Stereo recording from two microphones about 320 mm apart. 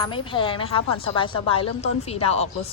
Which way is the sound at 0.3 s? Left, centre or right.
Centre.